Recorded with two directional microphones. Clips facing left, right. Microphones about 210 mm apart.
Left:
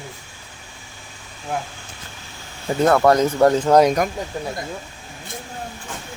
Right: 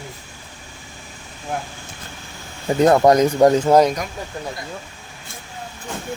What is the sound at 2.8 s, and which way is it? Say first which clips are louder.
Speech: right 2 dB; 20° right (ahead or behind).